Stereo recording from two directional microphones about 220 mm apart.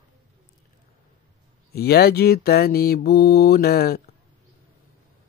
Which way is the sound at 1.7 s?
45° left (ahead or behind).